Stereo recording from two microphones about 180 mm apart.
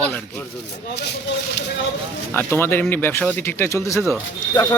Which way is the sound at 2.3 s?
10° left (ahead or behind).